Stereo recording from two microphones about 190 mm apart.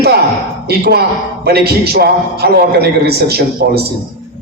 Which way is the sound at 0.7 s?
55° right (ahead or behind).